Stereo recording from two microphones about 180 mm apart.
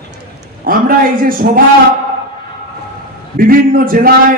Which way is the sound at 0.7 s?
50° right (ahead or behind).